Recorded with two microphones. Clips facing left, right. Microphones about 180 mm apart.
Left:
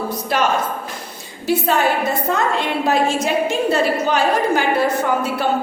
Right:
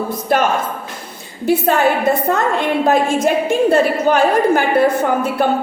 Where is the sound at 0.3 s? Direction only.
50° right (ahead or behind).